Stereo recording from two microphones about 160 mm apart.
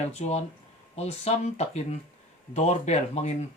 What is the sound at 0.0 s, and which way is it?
Speech, 40° left (ahead or behind).